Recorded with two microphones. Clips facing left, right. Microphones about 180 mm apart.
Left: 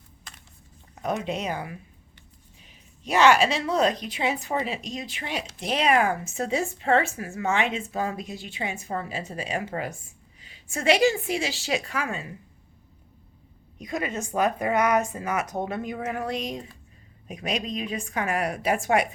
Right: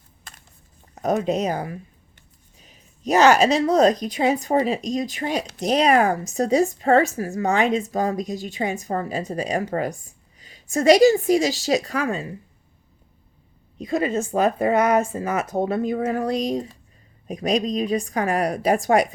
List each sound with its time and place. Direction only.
0.9 s speech: 40° right (ahead or behind)
13.7 s speech: 30° right (ahead or behind)